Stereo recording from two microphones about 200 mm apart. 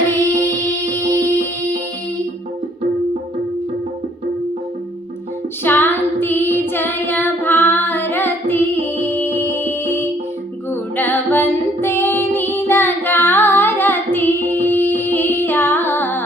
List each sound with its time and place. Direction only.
0.3 s music: 15° right (ahead or behind)
5.6 s child singing: 10° left (ahead or behind)
10.7 s music: 10° left (ahead or behind)